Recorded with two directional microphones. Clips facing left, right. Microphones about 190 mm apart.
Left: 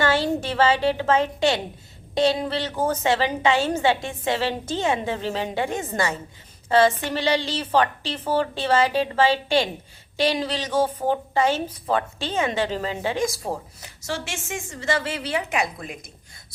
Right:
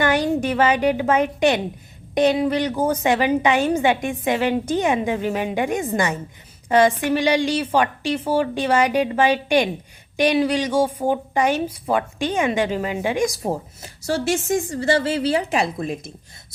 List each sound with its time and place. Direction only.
0.0 s a woman's voice: 15° right (ahead or behind)